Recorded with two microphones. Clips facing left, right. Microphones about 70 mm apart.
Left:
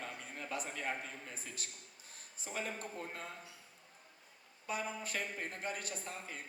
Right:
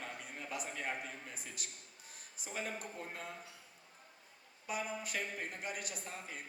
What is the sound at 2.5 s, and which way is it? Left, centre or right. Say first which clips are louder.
Speech: left 1 dB; left.